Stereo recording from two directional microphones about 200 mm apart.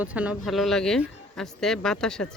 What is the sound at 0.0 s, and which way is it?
Speech, 5° right (ahead or behind).